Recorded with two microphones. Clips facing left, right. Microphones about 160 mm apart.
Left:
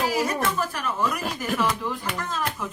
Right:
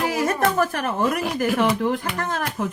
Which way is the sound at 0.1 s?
55° right (ahead or behind).